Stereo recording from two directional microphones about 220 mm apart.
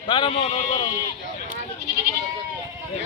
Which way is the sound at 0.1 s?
25° left (ahead or behind).